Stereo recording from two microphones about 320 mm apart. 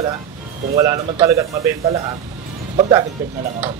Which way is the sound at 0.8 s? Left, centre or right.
Centre.